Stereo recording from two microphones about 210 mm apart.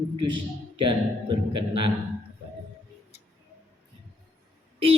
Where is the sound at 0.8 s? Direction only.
25° right (ahead or behind).